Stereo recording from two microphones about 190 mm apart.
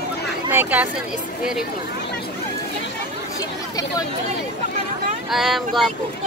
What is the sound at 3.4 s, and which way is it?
Chatter, 20° left (ahead or behind).